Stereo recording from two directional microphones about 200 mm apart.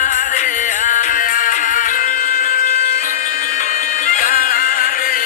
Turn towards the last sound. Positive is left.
turn(degrees=45)  # may be behind; listen again after turning